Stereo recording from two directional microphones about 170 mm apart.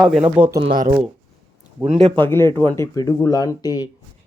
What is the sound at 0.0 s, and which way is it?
Speech, centre (ahead or behind).